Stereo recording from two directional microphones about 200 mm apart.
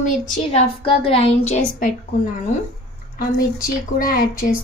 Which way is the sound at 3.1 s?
45° left (ahead or behind).